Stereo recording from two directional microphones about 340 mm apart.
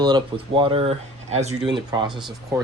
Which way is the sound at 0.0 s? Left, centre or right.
Centre.